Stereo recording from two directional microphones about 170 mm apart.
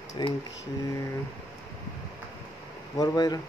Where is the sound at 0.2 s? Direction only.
25° left (ahead or behind).